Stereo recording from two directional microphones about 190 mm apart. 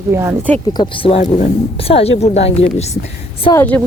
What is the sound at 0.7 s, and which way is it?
A woman's voice, 25° left (ahead or behind).